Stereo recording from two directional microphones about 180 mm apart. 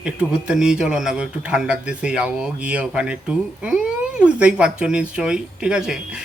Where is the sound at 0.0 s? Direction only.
5° right (ahead or behind).